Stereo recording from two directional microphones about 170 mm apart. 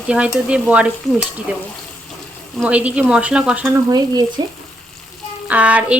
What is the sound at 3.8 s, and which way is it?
Speech, 25° right (ahead or behind).